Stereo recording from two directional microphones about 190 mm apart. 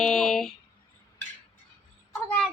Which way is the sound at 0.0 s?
Centre (ahead or behind).